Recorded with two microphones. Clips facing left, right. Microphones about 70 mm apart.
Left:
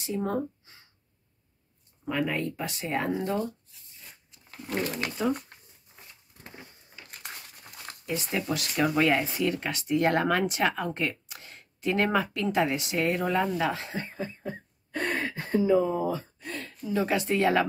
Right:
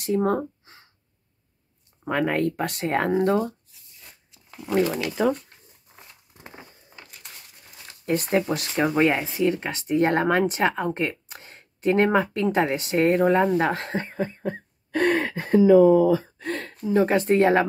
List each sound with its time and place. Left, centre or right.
0.0 s a sound: right
2.0 s speech: right
8.0 s speech: right
13.7 s speech: right
14.1 s a sound: right
16.8 s speech: right